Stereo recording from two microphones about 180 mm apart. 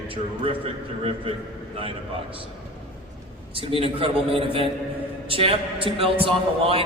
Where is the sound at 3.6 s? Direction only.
30° right (ahead or behind).